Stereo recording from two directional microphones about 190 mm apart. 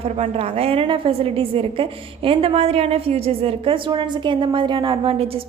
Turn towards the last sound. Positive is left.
turn(degrees=-30)  # may be behind; listen again after turning